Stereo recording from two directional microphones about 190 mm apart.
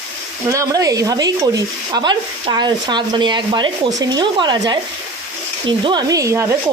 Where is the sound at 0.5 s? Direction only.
20° right (ahead or behind).